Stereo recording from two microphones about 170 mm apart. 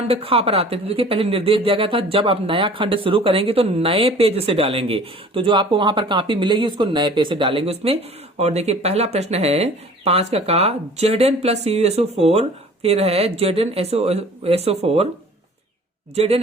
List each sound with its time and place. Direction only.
0.1 s speech: 35° right (ahead or behind)
16.1 s speech: 35° right (ahead or behind)